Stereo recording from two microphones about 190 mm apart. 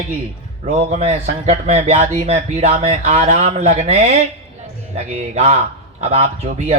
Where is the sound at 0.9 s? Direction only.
35° right (ahead or behind).